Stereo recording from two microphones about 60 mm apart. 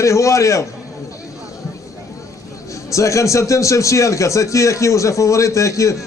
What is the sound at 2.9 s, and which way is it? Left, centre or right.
A man's voice, left.